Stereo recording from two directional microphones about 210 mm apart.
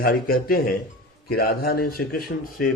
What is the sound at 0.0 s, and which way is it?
Speech, 45° left (ahead or behind).